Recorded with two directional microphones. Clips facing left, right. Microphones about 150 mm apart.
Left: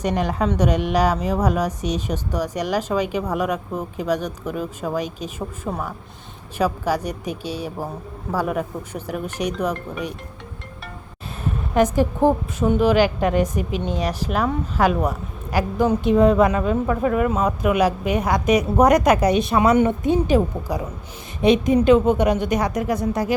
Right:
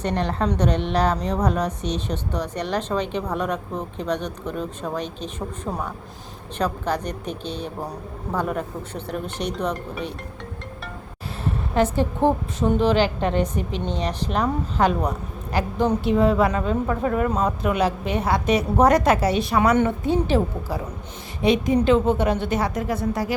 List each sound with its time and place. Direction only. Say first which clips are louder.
0.0 s a woman's voice: left 2 dB; 10° left (ahead or behind)
11.7 s a woman's voice: left 3 dB; 15° left (ahead or behind)